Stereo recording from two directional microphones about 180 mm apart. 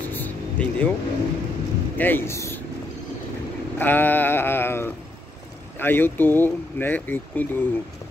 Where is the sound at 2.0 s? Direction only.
10° left (ahead or behind).